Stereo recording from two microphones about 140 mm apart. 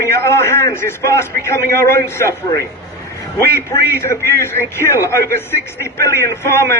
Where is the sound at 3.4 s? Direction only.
20° left (ahead or behind).